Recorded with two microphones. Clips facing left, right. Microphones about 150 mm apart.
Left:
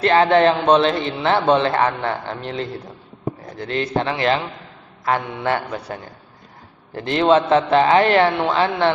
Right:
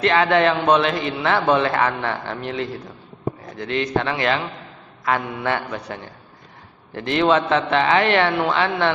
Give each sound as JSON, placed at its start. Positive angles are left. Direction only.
{"t": 0.0, "sound": "a man's voice", "side_deg": 35}